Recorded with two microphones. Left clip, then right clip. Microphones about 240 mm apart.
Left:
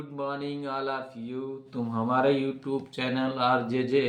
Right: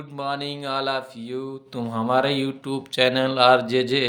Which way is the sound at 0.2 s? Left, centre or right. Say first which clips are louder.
Right 5 dB; right.